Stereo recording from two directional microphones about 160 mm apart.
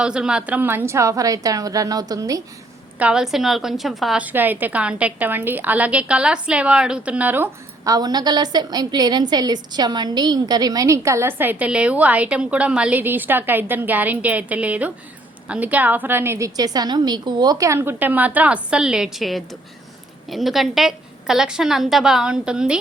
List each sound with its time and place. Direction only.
0.0 s a woman's voice: 5° right (ahead or behind); by 2.4 s 20° right (ahead or behind)
3.0 s a woman's voice: 5° right (ahead or behind)
7.9 s a woman's voice: 25° right (ahead or behind); by 22.8 s 5° right (ahead or behind)